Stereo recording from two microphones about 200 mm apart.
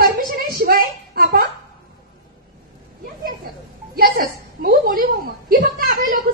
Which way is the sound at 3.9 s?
45° right (ahead or behind).